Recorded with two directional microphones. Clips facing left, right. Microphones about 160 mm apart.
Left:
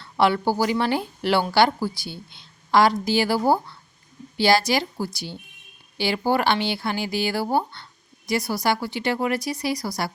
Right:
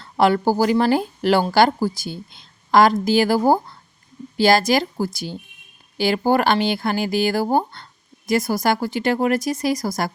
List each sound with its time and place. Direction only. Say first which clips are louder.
0.0 s speech: right 3 dB; 45° right (ahead or behind)